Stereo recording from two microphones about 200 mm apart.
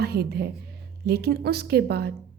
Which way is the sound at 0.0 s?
55° right (ahead or behind).